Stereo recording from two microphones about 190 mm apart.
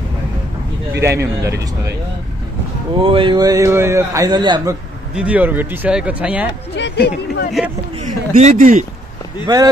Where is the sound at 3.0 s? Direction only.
25° right (ahead or behind).